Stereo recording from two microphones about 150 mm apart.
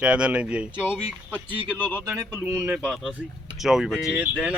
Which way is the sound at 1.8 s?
15° left (ahead or behind).